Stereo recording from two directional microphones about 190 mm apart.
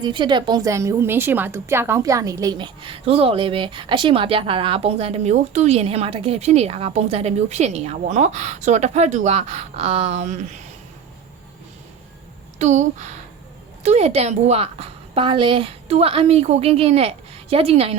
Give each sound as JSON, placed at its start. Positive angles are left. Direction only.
{"t": 0.0, "sound": "a woman's voice", "side_deg": -25}
{"t": 12.5, "sound": "a woman's voice", "side_deg": -40}